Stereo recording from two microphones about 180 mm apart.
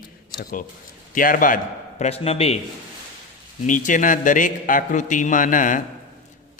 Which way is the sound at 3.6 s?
45° left (ahead or behind).